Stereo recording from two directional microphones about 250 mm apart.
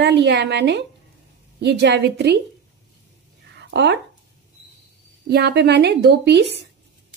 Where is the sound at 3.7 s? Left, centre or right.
Right.